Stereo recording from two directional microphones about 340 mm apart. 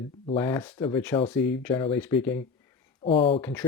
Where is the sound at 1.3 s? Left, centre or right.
Left.